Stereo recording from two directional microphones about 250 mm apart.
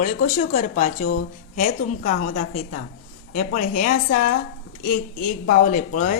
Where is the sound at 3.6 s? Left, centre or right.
Left.